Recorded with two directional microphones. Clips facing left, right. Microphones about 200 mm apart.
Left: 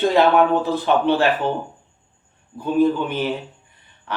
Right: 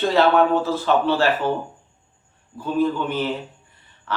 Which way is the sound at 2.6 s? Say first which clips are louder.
Left 3 dB; 15° left (ahead or behind).